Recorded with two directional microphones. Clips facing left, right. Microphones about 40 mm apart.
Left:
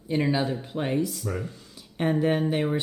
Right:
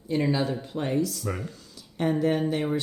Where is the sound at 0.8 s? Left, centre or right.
Left.